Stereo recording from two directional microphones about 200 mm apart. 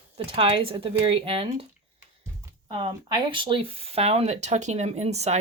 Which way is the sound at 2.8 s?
25° right (ahead or behind).